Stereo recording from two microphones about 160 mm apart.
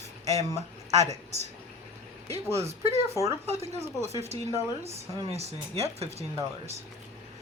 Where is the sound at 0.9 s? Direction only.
45° right (ahead or behind).